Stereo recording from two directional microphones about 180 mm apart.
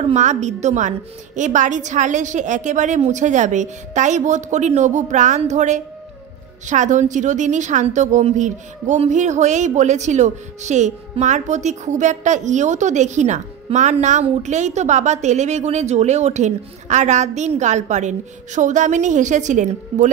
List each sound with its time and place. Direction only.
0.0 s a woman's voice: 40° right (ahead or behind)